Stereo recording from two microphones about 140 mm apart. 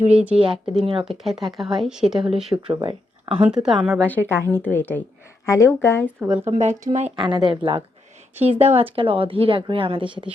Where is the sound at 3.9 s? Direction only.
10° left (ahead or behind).